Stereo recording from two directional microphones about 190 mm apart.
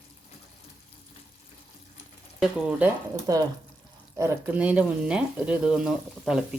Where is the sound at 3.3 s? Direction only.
15° right (ahead or behind).